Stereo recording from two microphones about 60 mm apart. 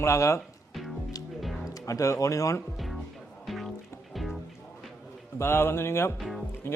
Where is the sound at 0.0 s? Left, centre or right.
Left.